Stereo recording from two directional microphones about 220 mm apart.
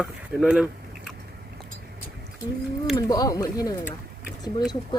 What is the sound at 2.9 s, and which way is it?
Speech, 15° left (ahead or behind).